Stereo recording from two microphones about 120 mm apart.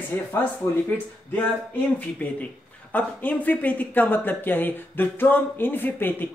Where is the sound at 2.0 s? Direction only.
10° left (ahead or behind).